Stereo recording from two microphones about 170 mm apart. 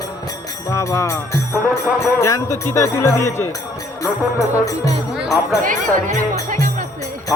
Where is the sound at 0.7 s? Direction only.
15° left (ahead or behind).